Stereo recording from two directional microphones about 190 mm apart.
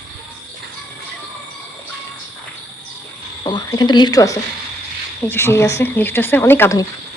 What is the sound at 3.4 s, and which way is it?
Speech, 20° left (ahead or behind).